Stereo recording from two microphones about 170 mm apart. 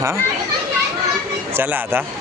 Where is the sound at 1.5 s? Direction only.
10° right (ahead or behind).